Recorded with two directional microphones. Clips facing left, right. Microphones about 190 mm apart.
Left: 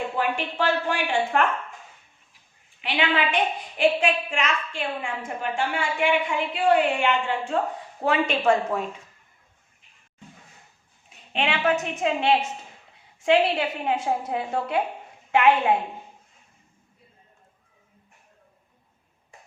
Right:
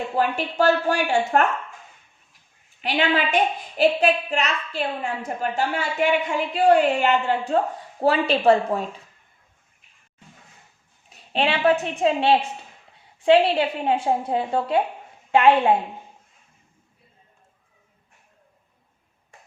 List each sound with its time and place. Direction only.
0.2 s a woman's voice: 40° right (ahead or behind)
2.8 s a woman's voice: 40° right (ahead or behind)
11.1 s a woman's voice: 35° right (ahead or behind)